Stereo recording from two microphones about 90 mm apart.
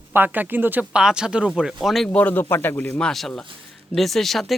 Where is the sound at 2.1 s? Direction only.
20° left (ahead or behind).